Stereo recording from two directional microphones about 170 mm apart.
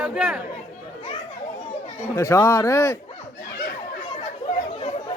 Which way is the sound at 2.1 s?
15° left (ahead or behind).